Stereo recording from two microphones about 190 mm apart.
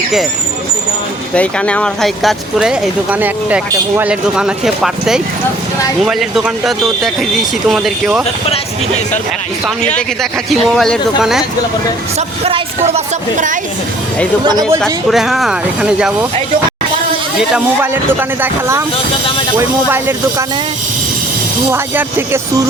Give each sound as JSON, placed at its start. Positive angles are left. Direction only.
{"t": 1.3, "sound": "speech", "side_deg": 5}
{"t": 10.5, "sound": "speech", "side_deg": 0}
{"t": 12.5, "sound": "a woman's voice", "side_deg": -30}
{"t": 14.4, "sound": "speech", "side_deg": -20}
{"t": 14.8, "sound": "speech", "side_deg": 0}
{"t": 17.5, "sound": "speech", "side_deg": -10}
{"t": 21.7, "sound": "speech", "side_deg": -15}